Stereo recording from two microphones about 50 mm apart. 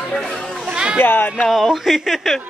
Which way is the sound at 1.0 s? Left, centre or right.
Left.